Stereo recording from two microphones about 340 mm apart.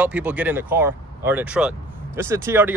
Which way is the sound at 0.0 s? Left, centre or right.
Centre.